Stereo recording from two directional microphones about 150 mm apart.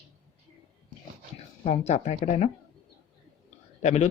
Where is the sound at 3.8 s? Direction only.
50° left (ahead or behind).